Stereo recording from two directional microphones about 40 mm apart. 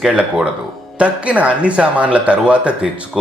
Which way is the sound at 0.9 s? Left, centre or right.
Right.